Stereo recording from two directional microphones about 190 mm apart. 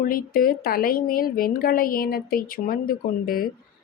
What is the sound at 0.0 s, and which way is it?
A woman's voice, 50° left (ahead or behind).